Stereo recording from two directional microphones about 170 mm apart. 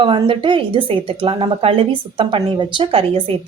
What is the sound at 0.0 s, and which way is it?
A woman's voice, 30° right (ahead or behind).